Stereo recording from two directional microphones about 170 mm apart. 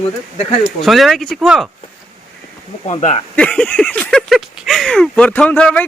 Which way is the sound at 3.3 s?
5° left (ahead or behind).